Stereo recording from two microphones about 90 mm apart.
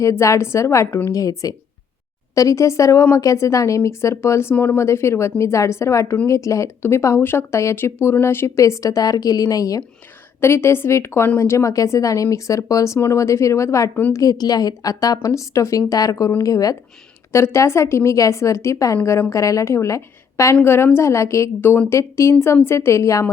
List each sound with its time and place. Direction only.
0.0 s speech: 35° left (ahead or behind)
10.4 s a woman's voice: 25° left (ahead or behind)
17.3 s a woman's voice: 30° left (ahead or behind)